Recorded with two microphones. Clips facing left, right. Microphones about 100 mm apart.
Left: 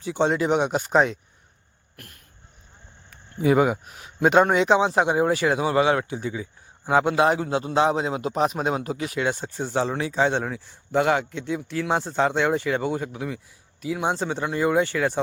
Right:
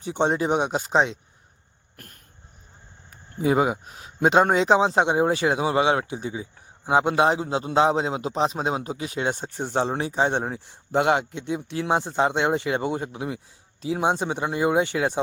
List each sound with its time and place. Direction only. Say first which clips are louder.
0.0 s speech: left 1 dB; 25° right (ahead or behind)
3.1 s speech: left 2 dB; 30° right (ahead or behind)